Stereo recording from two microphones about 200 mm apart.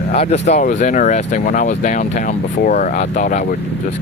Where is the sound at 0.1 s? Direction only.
35° left (ahead or behind).